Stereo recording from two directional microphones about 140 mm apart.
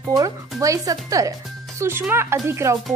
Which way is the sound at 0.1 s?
25° right (ahead or behind).